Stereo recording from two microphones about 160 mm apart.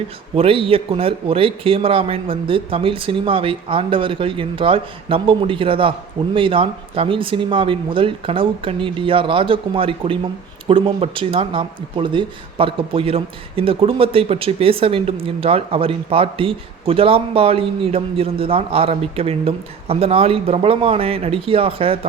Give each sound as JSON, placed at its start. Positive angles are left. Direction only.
{"t": 0.3, "sound": "speech", "side_deg": -35}